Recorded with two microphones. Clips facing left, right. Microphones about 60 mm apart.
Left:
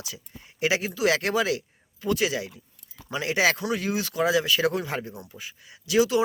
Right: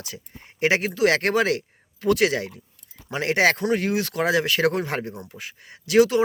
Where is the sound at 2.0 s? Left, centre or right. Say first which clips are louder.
Right 5 dB; right.